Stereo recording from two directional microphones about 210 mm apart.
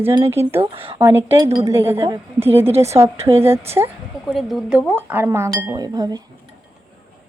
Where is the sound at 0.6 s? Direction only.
25° right (ahead or behind).